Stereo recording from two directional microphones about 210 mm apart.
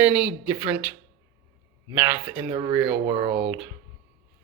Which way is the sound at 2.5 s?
20° right (ahead or behind).